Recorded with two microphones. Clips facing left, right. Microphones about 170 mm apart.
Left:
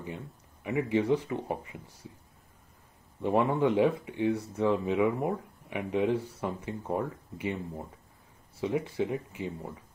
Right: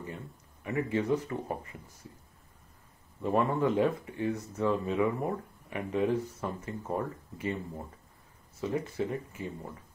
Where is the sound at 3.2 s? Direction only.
15° left (ahead or behind).